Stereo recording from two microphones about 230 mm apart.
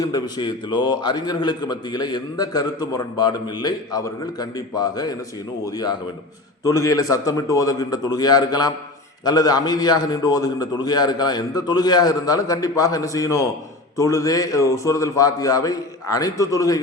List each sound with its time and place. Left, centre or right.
0.0 s a man's voice: centre